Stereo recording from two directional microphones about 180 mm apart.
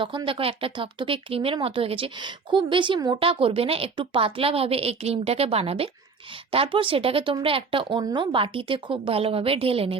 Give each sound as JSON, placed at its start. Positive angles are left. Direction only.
{"t": 0.0, "sound": "speech", "side_deg": -30}